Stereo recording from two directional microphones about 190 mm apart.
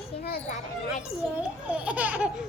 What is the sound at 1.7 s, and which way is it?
Speech, 5° right (ahead or behind).